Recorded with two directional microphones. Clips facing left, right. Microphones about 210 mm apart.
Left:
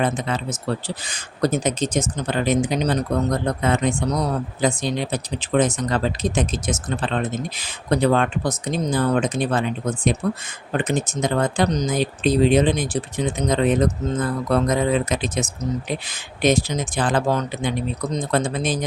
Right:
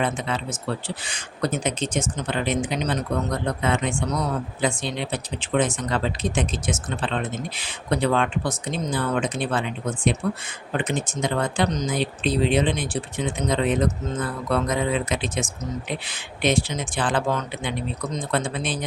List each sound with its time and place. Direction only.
0.0 s speech: 40° left (ahead or behind)